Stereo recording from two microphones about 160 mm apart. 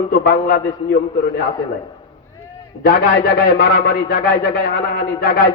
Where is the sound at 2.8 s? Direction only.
60° left (ahead or behind).